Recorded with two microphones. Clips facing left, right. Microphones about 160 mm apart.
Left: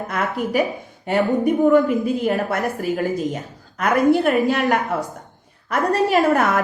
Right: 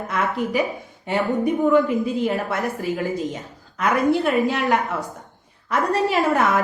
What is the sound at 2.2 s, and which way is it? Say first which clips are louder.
A woman's voice: left 2 dB; 50° left (ahead or behind).